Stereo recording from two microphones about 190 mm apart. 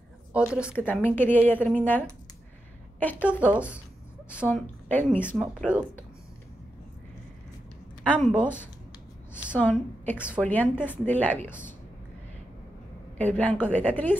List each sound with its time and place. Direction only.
0.3 s a woman's voice: 5° right (ahead or behind)
0.8 s speech: 10° left (ahead or behind)
3.2 s speech: 10° right (ahead or behind)
4.5 s speech: 10° left (ahead or behind)
8.0 s a woman's voice: 5° left (ahead or behind)
9.6 s speech: 10° left (ahead or behind)
10.1 s speech: 5° right (ahead or behind)
10.4 s speech: 10° left (ahead or behind)
13.2 s speech: 5° left (ahead or behind)